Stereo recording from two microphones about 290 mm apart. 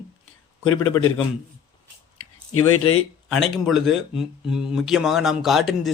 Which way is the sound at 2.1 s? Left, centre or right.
Left.